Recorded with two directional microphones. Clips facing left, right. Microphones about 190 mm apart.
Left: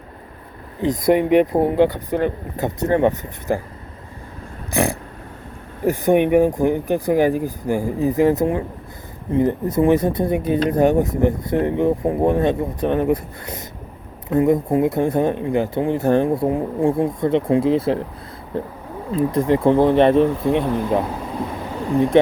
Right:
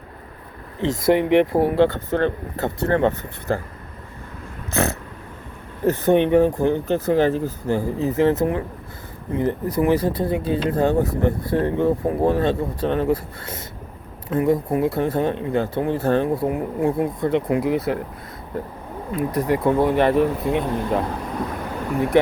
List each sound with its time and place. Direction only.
1.3 s speech: 20° left (ahead or behind)
4.7 s a sound: 15° left (ahead or behind)
5.8 s speech: 15° left (ahead or behind)
16.5 s speech: 25° left (ahead or behind)